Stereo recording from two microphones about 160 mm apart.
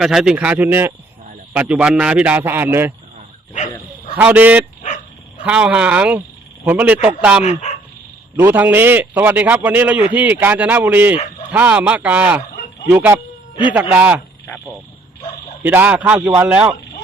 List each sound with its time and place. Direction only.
0.0 s a man's voice: centre (ahead or behind)
4.1 s a man's voice: 10° right (ahead or behind)
7.4 s speech: 45° left (ahead or behind)
8.4 s a man's voice: 15° right (ahead or behind)
15.6 s a man's voice: 10° right (ahead or behind)